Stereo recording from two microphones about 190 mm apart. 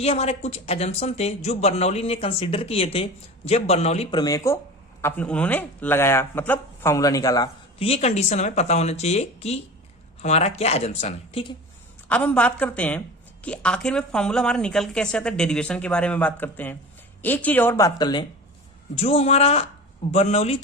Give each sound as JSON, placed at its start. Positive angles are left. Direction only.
{"t": 0.0, "sound": "speech", "side_deg": 35}
{"t": 4.2, "sound": "a man's voice", "side_deg": 15}
{"t": 12.0, "sound": "speech", "side_deg": 5}
{"t": 18.9, "sound": "speech", "side_deg": 30}